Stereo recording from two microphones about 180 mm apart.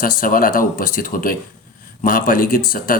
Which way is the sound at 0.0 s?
50° left (ahead or behind).